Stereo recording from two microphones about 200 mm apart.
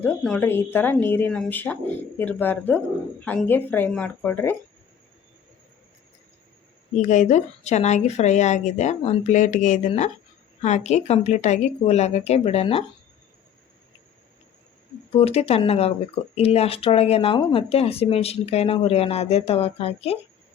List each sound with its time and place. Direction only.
0.0 s a woman's voice: 5° left (ahead or behind)
6.9 s a woman's voice: 40° left (ahead or behind)
15.1 s a woman's voice: 30° left (ahead or behind)